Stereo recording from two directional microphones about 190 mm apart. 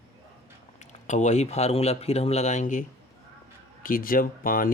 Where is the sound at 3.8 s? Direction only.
45° left (ahead or behind).